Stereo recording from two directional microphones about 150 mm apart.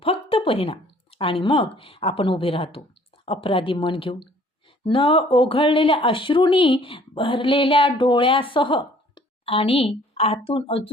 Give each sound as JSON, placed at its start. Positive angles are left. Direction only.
{"t": 0.0, "sound": "speech", "side_deg": 40}